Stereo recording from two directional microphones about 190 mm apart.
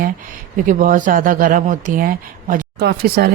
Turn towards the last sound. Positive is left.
turn(degrees=-55)  # may be behind; listen again after turning